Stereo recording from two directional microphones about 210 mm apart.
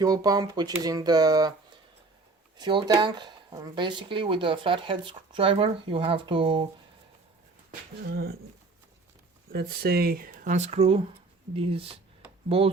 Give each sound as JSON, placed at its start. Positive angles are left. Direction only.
{"t": 0.0, "sound": "speech", "side_deg": -15}
{"t": 2.6, "sound": "speech", "side_deg": -20}
{"t": 7.7, "sound": "speech", "side_deg": -45}
{"t": 9.5, "sound": "speech", "side_deg": -45}